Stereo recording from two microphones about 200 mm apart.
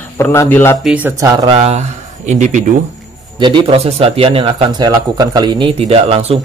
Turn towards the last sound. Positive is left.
turn(degrees=-30)  # may be behind; listen again after turning